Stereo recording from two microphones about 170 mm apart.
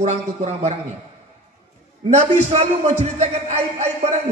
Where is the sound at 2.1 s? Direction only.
40° right (ahead or behind).